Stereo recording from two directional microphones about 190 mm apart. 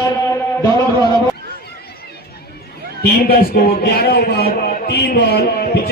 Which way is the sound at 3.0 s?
55° left (ahead or behind).